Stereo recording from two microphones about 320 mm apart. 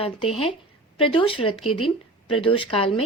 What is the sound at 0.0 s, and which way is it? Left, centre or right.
A woman's voice, centre.